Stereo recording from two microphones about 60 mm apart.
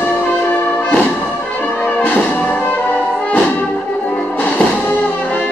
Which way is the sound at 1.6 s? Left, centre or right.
Left.